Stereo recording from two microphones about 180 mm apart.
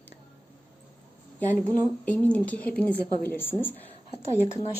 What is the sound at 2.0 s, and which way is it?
A woman's voice, 5° left (ahead or behind).